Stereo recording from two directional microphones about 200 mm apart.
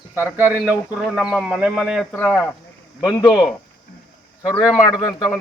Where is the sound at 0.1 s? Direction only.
10° right (ahead or behind).